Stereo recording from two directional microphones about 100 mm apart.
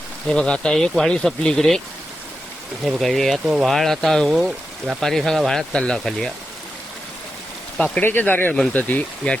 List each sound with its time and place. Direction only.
0.3 s speech: 10° left (ahead or behind)
3.0 s speech: centre (ahead or behind)
3.4 s speech: 10° right (ahead or behind); by 6.3 s 5° left (ahead or behind)
8.0 s speech: 20° left (ahead or behind)